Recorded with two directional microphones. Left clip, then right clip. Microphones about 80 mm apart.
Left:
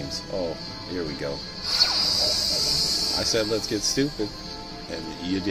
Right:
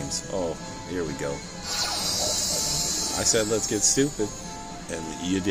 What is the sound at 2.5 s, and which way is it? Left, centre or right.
Cricket, left.